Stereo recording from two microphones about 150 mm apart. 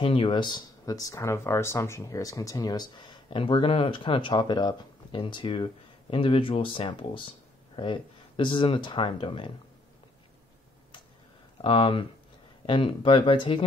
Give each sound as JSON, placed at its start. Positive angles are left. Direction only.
{"t": 0.0, "sound": "speech", "side_deg": 35}
{"t": 11.6, "sound": "speech", "side_deg": 35}